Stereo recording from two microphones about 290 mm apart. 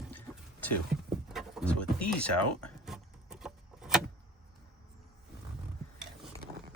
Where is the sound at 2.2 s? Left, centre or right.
Left.